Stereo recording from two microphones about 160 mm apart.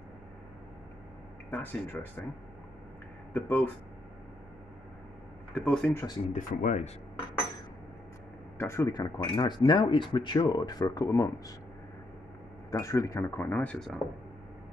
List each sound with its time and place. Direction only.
1.5 s speech: 10° left (ahead or behind)
3.3 s speech: 10° left (ahead or behind)
5.5 s speech: 5° left (ahead or behind)
6.3 s speech: 50° left (ahead or behind)
8.5 s speech: 15° left (ahead or behind)
12.7 s speech: 20° left (ahead or behind); by 14.0 s centre (ahead or behind)